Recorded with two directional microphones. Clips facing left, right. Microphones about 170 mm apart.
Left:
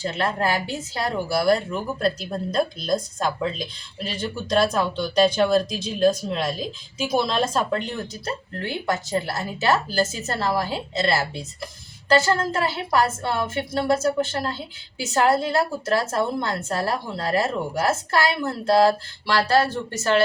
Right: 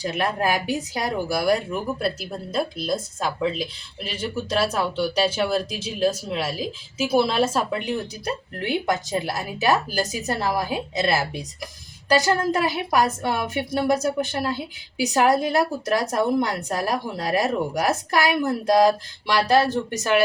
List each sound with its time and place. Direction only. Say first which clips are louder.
0.0 s speech: even; 15° right (ahead or behind)